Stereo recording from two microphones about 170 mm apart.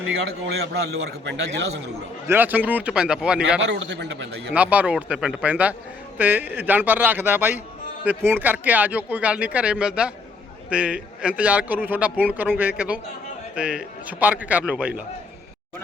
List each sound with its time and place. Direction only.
0.4 s a man's voice: 75° right (ahead or behind); by 1.6 s 90° right
2.2 s a man's voice: 10° right (ahead or behind)
3.6 s a man's voice: 90° right
4.5 s a man's voice: 10° right (ahead or behind)